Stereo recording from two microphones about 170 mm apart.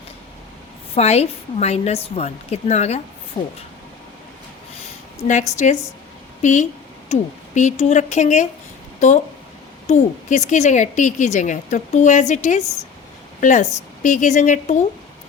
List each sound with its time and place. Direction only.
0.9 s a woman's voice: 40° left (ahead or behind)
5.3 s a woman's voice: 45° left (ahead or behind)